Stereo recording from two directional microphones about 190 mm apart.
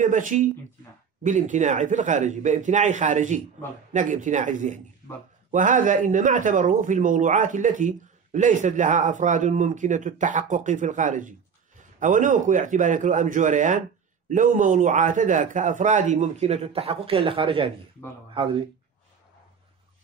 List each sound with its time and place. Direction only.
0.0 s a man's voice: 40° right (ahead or behind)